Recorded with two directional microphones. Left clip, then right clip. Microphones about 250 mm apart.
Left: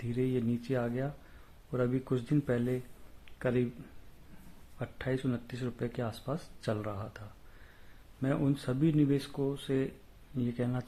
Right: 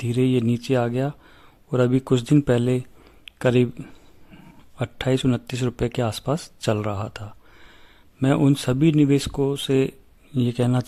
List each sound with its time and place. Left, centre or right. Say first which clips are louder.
0.1 s speech: right 11 dB; right
3.2 s a sound: right 12 dB; right
4.8 s speech: right 12 dB; right